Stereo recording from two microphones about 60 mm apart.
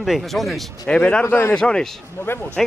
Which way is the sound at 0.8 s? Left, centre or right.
Centre.